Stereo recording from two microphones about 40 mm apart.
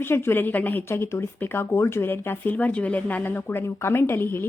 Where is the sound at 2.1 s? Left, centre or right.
Left.